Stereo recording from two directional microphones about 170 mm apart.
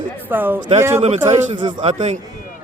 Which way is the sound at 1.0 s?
35° right (ahead or behind).